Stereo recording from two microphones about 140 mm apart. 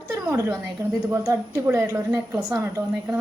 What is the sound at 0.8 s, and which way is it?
A woman's voice, 25° right (ahead or behind).